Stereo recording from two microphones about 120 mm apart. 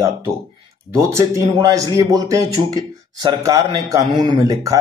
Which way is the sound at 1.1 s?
25° right (ahead or behind).